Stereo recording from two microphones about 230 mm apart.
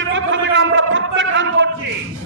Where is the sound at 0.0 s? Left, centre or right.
Right.